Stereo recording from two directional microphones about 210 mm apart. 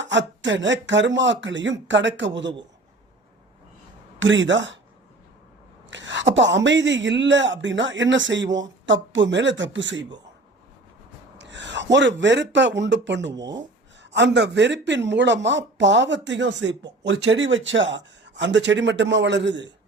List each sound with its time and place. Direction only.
0.0 s a woman's voice: 60° right (ahead or behind)
4.2 s a woman's voice: 60° right (ahead or behind)
5.9 s a woman's voice: 60° right (ahead or behind)
11.3 s speech: 55° right (ahead or behind)
13.3 s speech: 20° right (ahead or behind)
14.0 s a woman's voice: 55° right (ahead or behind)